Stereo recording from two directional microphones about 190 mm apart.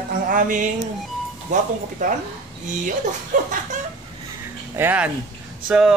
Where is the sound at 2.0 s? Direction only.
40° right (ahead or behind).